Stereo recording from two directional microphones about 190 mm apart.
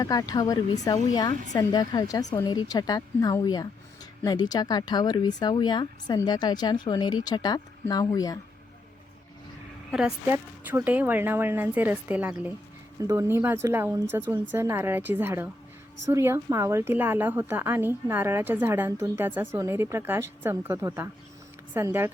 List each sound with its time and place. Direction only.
0.0 s a woman's voice: 20° left (ahead or behind)
9.9 s a woman's voice: 5° right (ahead or behind)